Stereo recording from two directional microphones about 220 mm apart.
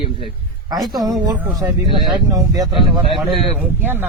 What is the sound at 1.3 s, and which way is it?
Speech, 10° right (ahead or behind).